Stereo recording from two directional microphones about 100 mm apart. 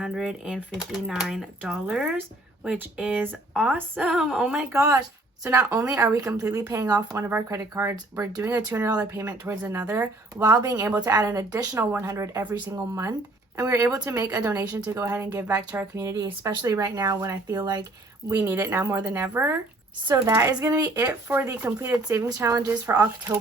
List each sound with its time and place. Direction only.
0.0 s speech: 5° right (ahead or behind)
2.7 s speech: 15° right (ahead or behind)
4.1 s speech: 5° right (ahead or behind)
4.7 s a woman's voice: 25° right (ahead or behind)
7.2 s a woman's voice: 25° right (ahead or behind)
8.3 s speech: 35° right (ahead or behind)
8.5 s a woman's voice: 20° right (ahead or behind)
11.8 s a woman's voice: 20° right (ahead or behind)
12.0 s a woman's voice: 35° right (ahead or behind)
14.8 s speech: 30° right (ahead or behind)
18.3 s a woman's voice: 30° right (ahead or behind)
21.2 s a woman's voice: 20° right (ahead or behind)
22.7 s a woman's voice: 20° right (ahead or behind)